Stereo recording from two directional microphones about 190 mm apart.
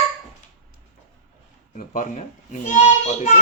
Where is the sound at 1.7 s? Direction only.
45° left (ahead or behind).